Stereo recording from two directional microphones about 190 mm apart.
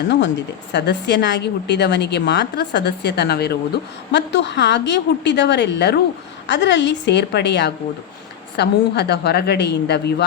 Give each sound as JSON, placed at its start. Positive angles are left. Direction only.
{"t": 0.7, "sound": "a woman's voice", "side_deg": 65}